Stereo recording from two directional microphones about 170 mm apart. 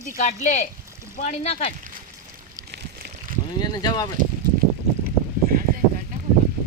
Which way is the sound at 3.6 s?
25° left (ahead or behind).